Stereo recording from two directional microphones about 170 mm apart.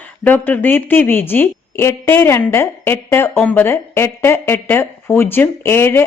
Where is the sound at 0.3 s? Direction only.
10° left (ahead or behind).